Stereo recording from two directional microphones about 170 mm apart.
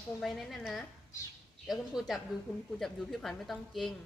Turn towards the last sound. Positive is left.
turn(degrees=0)  # may be behind; listen again after turning